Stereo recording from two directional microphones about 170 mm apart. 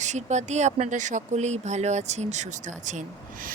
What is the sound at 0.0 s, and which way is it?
Speech, 45° right (ahead or behind).